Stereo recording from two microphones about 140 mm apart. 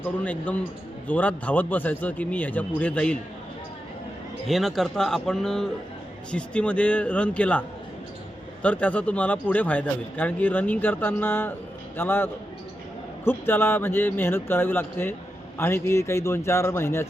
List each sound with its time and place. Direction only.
0.0 s speech: 10° left (ahead or behind)
4.4 s speech: centre (ahead or behind)
8.6 s a man's voice: 10° left (ahead or behind)